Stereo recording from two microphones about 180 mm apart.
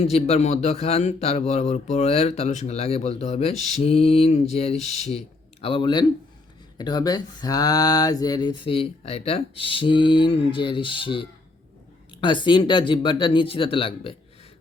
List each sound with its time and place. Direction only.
0.0 s speech: 35° left (ahead or behind)